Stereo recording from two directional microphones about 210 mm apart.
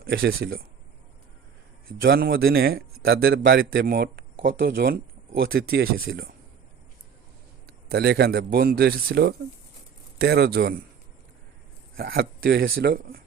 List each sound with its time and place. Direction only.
0.0 s a man's voice: 50° right (ahead or behind)
2.0 s a man's voice: 45° right (ahead or behind)
7.7 s a man's voice: 50° right (ahead or behind)
11.9 s a man's voice: 45° right (ahead or behind)